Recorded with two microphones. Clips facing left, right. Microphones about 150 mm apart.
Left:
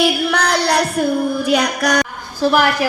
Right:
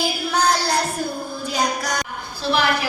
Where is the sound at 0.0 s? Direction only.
70° left (ahead or behind).